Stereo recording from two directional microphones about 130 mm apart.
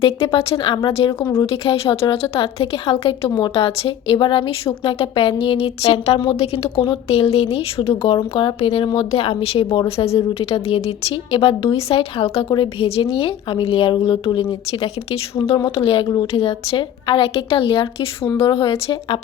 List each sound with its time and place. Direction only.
0.0 s speech: 50° left (ahead or behind)